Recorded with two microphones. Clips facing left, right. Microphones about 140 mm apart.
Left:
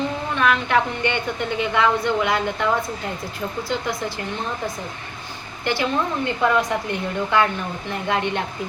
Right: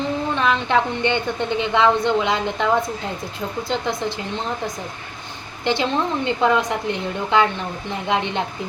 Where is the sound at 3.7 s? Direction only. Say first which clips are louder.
Right 3 dB; 20° right (ahead or behind).